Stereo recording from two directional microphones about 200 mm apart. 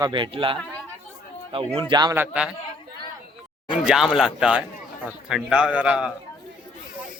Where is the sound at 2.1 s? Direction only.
5° right (ahead or behind).